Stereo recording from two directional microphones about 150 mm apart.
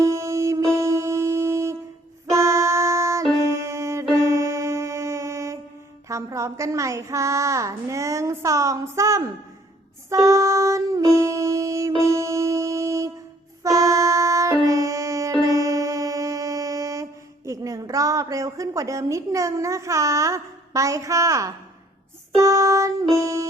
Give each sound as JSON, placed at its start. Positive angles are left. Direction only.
{"t": 0.0, "sound": "music", "side_deg": -20}
{"t": 6.1, "sound": "child singing", "side_deg": -20}
{"t": 10.1, "sound": "music", "side_deg": -20}
{"t": 23.1, "sound": "child singing", "side_deg": -20}